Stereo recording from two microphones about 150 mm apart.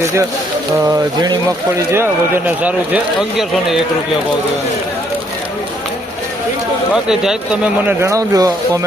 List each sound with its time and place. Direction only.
0.9 s speech: 25° right (ahead or behind); by 3.8 s centre (ahead or behind)
6.9 s speech: 5° right (ahead or behind)
8.0 s speech: 20° right (ahead or behind)